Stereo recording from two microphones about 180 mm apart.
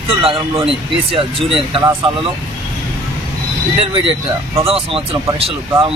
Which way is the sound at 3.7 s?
30° right (ahead or behind).